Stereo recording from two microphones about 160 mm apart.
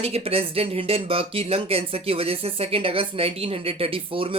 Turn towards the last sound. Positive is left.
turn(degrees=-35)  # may be behind; listen again after turning